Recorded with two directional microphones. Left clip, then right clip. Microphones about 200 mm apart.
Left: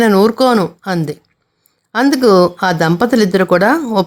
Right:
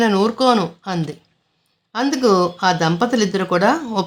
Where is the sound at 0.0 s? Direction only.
30° left (ahead or behind).